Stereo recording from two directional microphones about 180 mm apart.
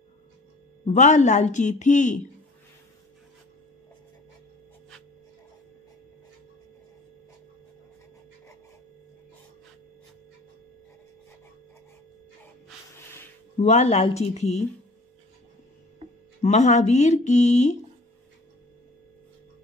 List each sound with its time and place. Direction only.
0.8 s speech: 40° left (ahead or behind)
13.6 s speech: 35° left (ahead or behind)
16.4 s speech: 40° left (ahead or behind)